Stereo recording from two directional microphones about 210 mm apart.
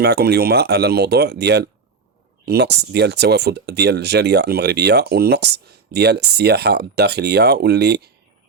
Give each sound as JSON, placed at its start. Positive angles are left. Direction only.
{"t": 0.0, "sound": "speech", "side_deg": -50}